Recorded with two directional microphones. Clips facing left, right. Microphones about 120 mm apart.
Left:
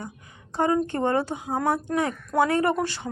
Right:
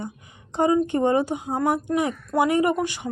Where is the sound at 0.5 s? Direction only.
15° right (ahead or behind).